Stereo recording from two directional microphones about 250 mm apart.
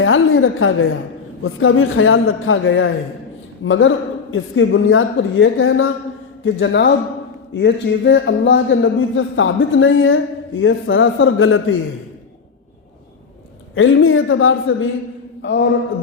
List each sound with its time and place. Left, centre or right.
0.0 s a woman's voice: left
13.7 s a man's voice: left